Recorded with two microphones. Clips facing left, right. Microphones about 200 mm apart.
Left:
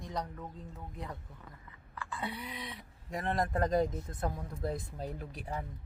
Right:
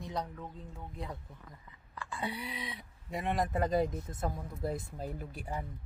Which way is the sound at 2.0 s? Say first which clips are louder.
Right 1 dB; 15° right (ahead or behind).